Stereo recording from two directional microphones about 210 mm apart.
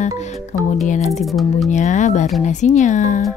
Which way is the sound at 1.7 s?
35° left (ahead or behind).